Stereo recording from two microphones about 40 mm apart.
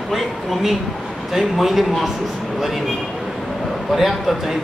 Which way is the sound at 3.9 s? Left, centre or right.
Centre.